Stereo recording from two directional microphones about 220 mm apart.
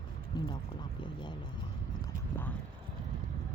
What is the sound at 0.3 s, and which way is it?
Speech, 20° left (ahead or behind).